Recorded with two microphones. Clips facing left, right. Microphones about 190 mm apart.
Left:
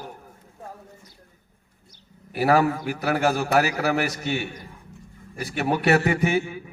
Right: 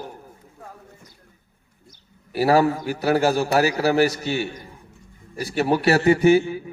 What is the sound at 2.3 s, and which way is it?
A man's voice, 30° right (ahead or behind).